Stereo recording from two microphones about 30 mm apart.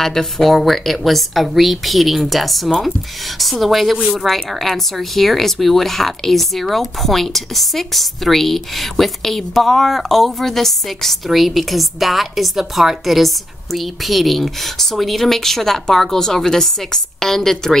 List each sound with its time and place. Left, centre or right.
0.0 s speech: centre
11.2 s speech: centre